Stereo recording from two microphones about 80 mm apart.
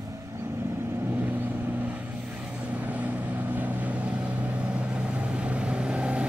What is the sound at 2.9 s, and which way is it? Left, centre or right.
Vehicle, centre.